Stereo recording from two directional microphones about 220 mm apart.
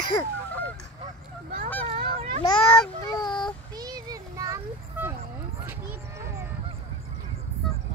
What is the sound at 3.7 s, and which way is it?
Children playing, 15° right (ahead or behind).